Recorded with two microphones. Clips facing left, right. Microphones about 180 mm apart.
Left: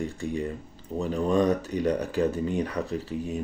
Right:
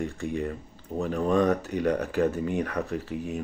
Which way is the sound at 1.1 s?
30° left (ahead or behind).